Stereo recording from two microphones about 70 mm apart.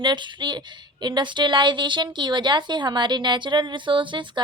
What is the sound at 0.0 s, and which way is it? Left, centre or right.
A woman's voice, right.